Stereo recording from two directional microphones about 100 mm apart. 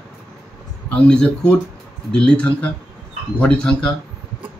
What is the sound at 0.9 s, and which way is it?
A man's voice, 10° left (ahead or behind).